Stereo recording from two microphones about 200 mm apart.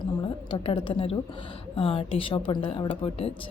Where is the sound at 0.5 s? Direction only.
25° left (ahead or behind).